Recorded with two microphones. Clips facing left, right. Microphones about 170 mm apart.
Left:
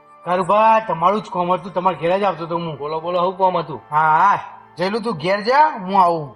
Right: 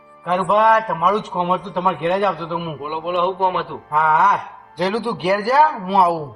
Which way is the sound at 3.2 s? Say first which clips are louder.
Left 2 dB; 20° left (ahead or behind).